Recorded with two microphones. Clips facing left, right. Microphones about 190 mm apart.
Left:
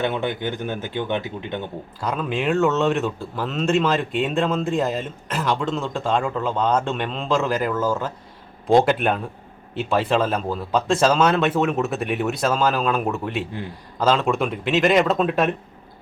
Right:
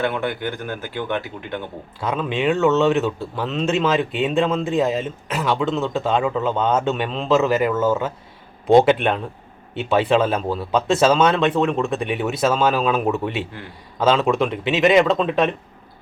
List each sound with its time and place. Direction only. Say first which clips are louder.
0.0 s speech: right 1 dB; 20° left (ahead or behind)
2.0 s speech: right 2 dB; centre (ahead or behind)